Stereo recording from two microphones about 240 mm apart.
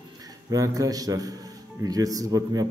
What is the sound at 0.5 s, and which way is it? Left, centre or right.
A man's voice, centre.